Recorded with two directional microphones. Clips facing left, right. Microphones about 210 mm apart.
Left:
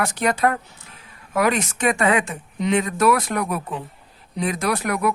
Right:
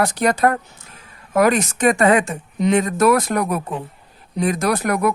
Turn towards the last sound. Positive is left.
turn(degrees=-45)  # may be behind; listen again after turning